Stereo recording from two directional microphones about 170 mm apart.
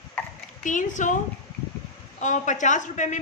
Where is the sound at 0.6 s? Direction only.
50° left (ahead or behind).